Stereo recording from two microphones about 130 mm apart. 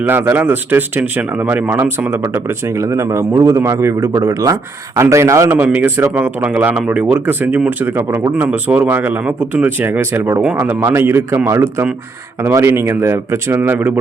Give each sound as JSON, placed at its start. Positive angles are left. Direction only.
{"t": 0.1, "sound": "speech", "side_deg": -15}